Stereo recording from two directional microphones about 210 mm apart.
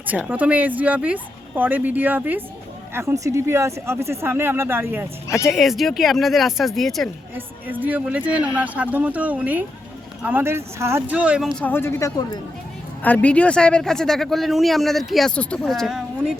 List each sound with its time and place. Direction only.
0.1 s speech: 5° right (ahead or behind)
11.6 s speech: 10° left (ahead or behind)